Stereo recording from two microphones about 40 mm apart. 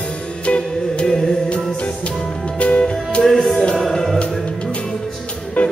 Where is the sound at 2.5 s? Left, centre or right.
Left.